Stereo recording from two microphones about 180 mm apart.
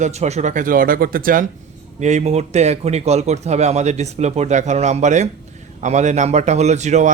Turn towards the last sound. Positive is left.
turn(degrees=-40)  # may be behind; listen again after turning